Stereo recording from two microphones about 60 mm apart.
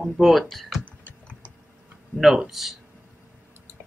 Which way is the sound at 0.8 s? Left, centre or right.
Left.